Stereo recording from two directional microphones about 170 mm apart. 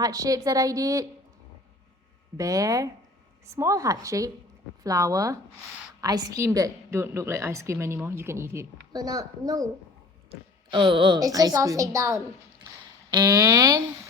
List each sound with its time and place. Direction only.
0.0 s a woman's voice: 20° right (ahead or behind)
2.4 s a woman's voice: 20° right (ahead or behind)
10.7 s a woman's voice: 30° right (ahead or behind)